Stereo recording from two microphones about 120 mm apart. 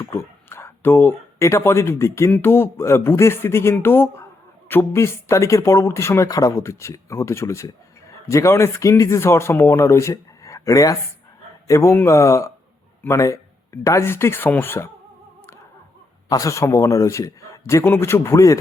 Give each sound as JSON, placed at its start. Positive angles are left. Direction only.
{"t": 0.0, "sound": "speech", "side_deg": 20}
{"t": 16.3, "sound": "speech", "side_deg": 25}